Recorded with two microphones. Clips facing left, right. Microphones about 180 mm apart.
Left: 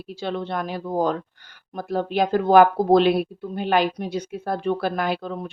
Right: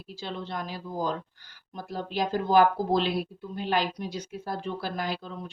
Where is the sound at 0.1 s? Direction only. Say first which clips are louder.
Left 8 dB; 60° left (ahead or behind).